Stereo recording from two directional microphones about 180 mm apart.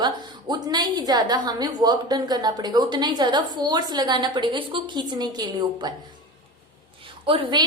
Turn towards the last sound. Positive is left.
turn(degrees=-25)  # may be behind; listen again after turning